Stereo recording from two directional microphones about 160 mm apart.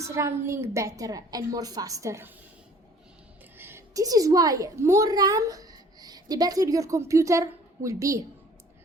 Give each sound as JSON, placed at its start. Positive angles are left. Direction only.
{"t": 0.0, "sound": "a woman's voice", "side_deg": -20}
{"t": 3.6, "sound": "a woman's voice", "side_deg": -15}